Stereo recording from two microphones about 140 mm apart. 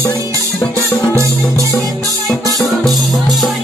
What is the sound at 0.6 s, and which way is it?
Music, 10° left (ahead or behind).